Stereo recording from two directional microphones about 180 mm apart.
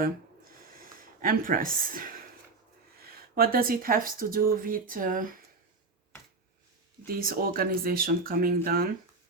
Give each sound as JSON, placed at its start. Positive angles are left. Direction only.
{"t": 0.0, "sound": "a sound", "side_deg": -50}
{"t": 3.0, "sound": "speech", "side_deg": -55}
{"t": 7.2, "sound": "speech", "side_deg": -55}